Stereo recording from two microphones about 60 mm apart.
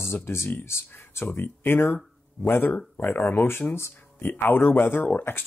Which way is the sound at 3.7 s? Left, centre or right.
Left.